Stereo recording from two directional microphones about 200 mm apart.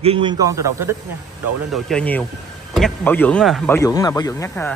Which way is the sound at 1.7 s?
Centre (ahead or behind).